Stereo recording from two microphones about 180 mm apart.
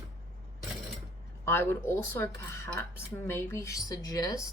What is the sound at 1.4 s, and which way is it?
Speech, 10° left (ahead or behind).